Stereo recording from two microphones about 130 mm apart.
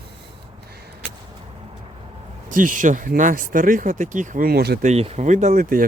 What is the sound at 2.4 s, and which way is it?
Speech, 90° right.